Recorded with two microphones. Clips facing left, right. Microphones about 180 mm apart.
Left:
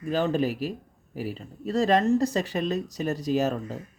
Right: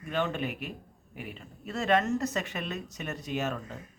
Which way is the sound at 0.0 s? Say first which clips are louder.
Left 6 dB; 35° left (ahead or behind).